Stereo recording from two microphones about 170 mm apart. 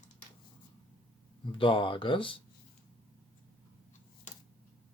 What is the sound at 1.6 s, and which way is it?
Speech, 30° left (ahead or behind).